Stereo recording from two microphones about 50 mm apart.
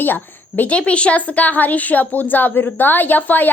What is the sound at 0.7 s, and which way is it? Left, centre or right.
A woman's voice, left.